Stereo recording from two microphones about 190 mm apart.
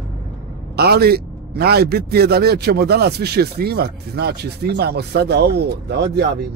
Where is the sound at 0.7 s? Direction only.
55° right (ahead or behind).